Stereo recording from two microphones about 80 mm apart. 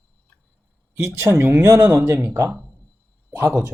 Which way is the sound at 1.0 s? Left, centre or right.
Right.